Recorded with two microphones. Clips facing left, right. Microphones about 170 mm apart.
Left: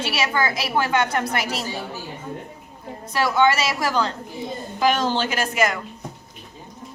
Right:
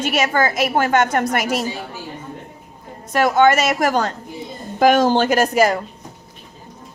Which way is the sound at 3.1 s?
50° right (ahead or behind).